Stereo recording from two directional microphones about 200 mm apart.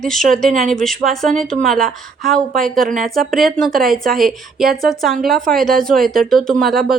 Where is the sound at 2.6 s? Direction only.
45° right (ahead or behind).